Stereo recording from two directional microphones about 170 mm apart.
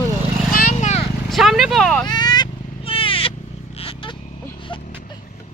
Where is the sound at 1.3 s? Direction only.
Centre (ahead or behind).